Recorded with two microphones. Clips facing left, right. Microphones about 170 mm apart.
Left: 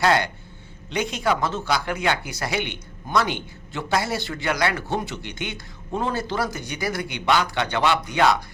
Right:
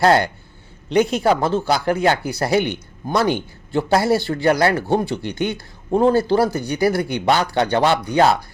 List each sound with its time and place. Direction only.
0.0 s speech: 35° right (ahead or behind)